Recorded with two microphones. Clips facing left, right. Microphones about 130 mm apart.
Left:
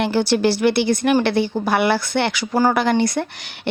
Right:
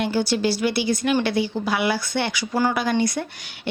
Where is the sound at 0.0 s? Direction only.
70° left (ahead or behind).